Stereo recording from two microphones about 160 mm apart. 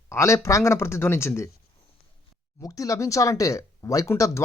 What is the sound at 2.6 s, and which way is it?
Speech, 20° left (ahead or behind).